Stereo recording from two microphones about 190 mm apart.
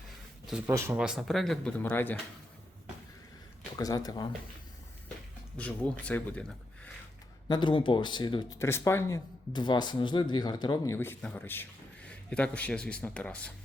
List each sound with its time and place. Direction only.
0.7 s speech: 10° right (ahead or behind); by 2.1 s 10° left (ahead or behind)
3.8 s speech: 20° left (ahead or behind)
5.5 s speech: 5° left (ahead or behind)
7.4 s speech: 25° left (ahead or behind)
10.9 s a man's voice: 10° left (ahead or behind)